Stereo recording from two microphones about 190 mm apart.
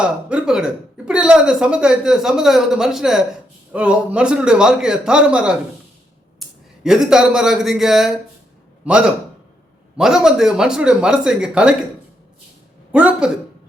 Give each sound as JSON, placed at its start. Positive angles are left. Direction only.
{"t": 0.0, "sound": "speech", "side_deg": -5}
{"t": 6.8, "sound": "a man's voice", "side_deg": -5}
{"t": 12.9, "sound": "speech", "side_deg": -5}